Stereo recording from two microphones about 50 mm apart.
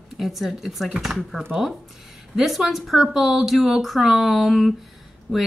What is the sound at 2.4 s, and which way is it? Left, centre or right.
Speech, centre.